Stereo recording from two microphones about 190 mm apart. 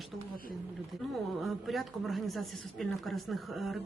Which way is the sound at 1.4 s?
Centre (ahead or behind).